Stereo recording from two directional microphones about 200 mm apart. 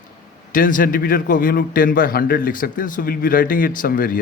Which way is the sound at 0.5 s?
40° left (ahead or behind).